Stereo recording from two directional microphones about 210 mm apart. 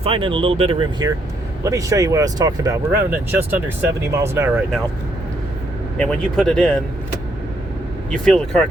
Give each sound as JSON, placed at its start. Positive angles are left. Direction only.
{"t": 0.0, "sound": "speech", "side_deg": -25}
{"t": 6.0, "sound": "speech", "side_deg": 0}
{"t": 8.1, "sound": "speech", "side_deg": 5}